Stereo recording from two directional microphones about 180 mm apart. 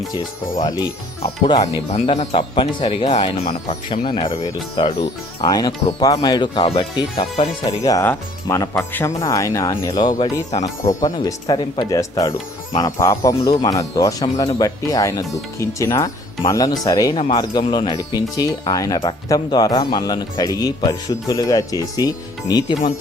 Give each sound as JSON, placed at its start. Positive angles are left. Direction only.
{"t": 0.1, "sound": "speech", "side_deg": 20}
{"t": 1.9, "sound": "speech", "side_deg": 35}
{"t": 7.8, "sound": "speech", "side_deg": 20}